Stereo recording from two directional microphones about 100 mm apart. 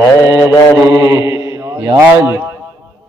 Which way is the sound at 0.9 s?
40° right (ahead or behind).